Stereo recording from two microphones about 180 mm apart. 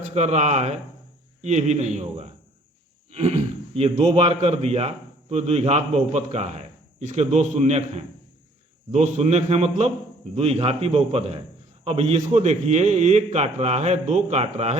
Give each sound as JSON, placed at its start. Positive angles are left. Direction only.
{"t": 0.1, "sound": "a man's voice", "side_deg": -40}